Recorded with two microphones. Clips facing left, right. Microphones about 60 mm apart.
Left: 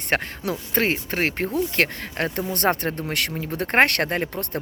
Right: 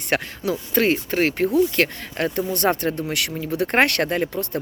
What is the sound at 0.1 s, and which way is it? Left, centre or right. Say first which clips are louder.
Speech: right 1 dB; left.